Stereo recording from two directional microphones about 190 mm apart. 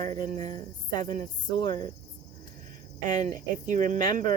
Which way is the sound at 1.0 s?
25° left (ahead or behind).